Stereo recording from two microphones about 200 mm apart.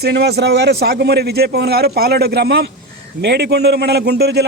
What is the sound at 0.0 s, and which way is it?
A man's voice, 55° right (ahead or behind).